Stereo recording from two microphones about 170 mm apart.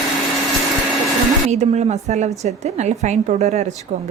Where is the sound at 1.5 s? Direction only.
40° right (ahead or behind).